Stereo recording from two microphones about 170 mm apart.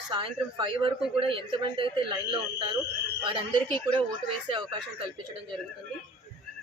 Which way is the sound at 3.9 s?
30° right (ahead or behind).